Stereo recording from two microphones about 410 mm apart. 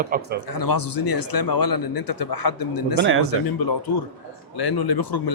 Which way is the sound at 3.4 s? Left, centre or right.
Left.